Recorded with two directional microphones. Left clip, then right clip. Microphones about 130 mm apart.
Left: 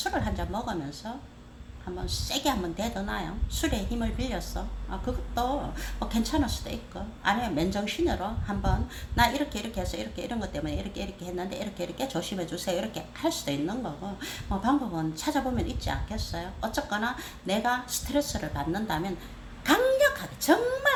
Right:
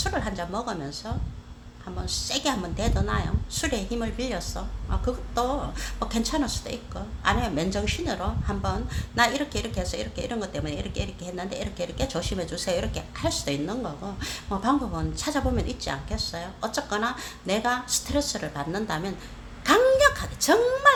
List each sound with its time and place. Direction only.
0.0 s a woman's voice: 25° right (ahead or behind)